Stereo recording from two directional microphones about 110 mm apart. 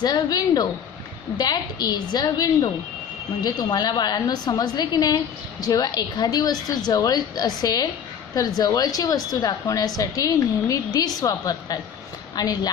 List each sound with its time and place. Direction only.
0.0 s a woman's voice: 35° left (ahead or behind)